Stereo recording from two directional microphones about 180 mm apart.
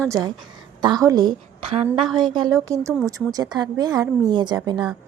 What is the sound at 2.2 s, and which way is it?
Speech, 25° right (ahead or behind).